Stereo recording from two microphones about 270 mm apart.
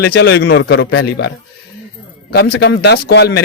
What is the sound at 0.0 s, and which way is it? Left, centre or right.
A man's voice, left.